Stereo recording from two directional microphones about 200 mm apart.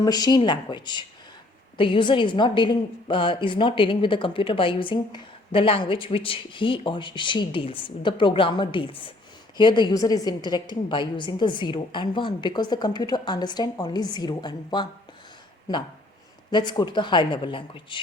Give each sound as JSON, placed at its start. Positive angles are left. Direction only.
{"t": 0.0, "sound": "a woman's voice", "side_deg": 20}
{"t": 16.5, "sound": "a woman's voice", "side_deg": 20}